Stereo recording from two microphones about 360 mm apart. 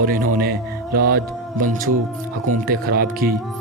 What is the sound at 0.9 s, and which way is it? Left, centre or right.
Speech, right.